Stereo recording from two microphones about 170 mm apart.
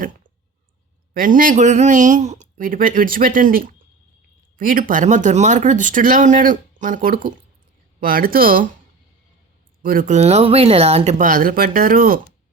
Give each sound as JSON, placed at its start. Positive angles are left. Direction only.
{"t": 1.1, "sound": "speech", "side_deg": -55}
{"t": 9.8, "sound": "speech", "side_deg": -55}